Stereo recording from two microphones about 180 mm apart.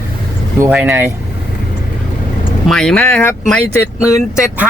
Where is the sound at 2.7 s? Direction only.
5° left (ahead or behind).